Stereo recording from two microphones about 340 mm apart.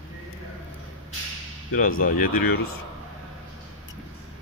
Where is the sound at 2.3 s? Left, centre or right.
Left.